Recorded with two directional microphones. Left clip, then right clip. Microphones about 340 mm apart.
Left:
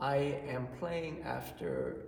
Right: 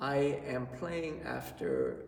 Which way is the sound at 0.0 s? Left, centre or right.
Centre.